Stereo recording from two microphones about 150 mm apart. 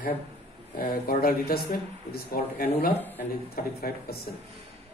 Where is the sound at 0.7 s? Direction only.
75° left (ahead or behind).